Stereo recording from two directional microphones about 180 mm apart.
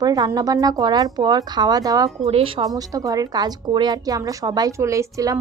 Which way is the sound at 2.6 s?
20° right (ahead or behind).